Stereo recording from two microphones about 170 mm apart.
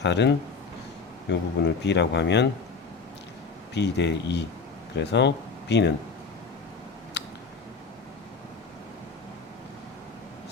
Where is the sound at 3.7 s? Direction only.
90° left.